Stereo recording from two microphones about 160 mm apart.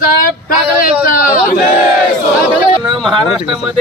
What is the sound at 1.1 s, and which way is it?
Speech, 65° left (ahead or behind).